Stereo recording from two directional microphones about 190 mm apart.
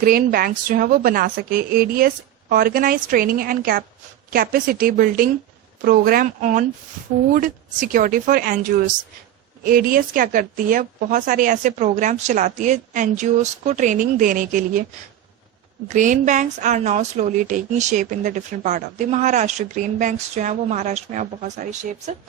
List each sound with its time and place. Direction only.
0.0 s a woman's voice: 50° right (ahead or behind)
15.9 s a woman's voice: 40° right (ahead or behind)